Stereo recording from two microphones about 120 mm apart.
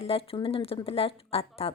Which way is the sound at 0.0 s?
55° left (ahead or behind).